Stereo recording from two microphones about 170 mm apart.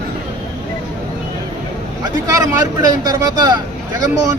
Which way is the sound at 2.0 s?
20° right (ahead or behind).